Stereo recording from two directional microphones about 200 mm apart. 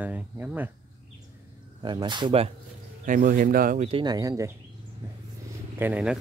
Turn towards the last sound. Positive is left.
turn(degrees=-5)  # may be behind; listen again after turning